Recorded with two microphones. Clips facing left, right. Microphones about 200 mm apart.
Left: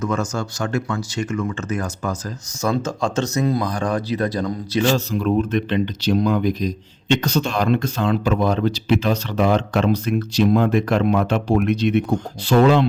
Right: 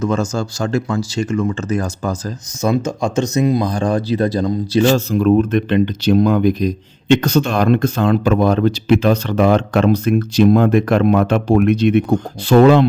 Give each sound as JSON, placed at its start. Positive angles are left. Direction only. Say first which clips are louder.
{"t": 0.0, "sound": "speech", "louder": "right 4 dB", "side_deg": -30}
{"t": 2.6, "sound": "speech", "louder": "right 4 dB", "side_deg": -15}
{"t": 3.7, "sound": "speech", "louder": "right 5 dB", "side_deg": -30}
{"t": 4.9, "sound": "speech", "louder": "right 6 dB", "side_deg": -50}